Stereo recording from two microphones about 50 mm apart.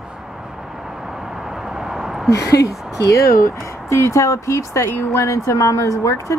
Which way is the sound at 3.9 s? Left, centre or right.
Left.